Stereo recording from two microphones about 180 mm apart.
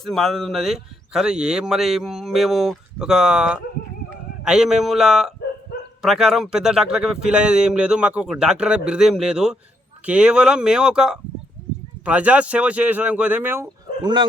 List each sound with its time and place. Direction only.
0.0 s a man's voice: centre (ahead or behind)
14.0 s speech: 25° right (ahead or behind)